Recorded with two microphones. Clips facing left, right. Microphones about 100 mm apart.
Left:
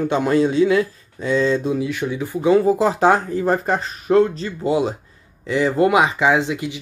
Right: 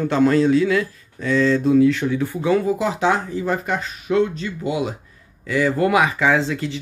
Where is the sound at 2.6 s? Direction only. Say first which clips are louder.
Left 4 dB; 35° left (ahead or behind).